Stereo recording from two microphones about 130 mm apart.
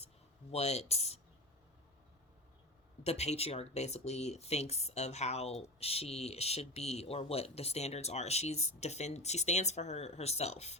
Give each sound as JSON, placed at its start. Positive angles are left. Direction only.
{"t": 0.5, "sound": "speech", "side_deg": 55}
{"t": 3.0, "sound": "speech", "side_deg": 55}